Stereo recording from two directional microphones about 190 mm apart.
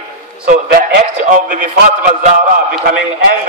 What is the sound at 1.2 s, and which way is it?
A man's voice, 45° right (ahead or behind).